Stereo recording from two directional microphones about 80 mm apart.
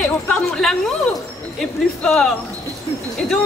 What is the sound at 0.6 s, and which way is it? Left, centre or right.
A woman's voice, centre.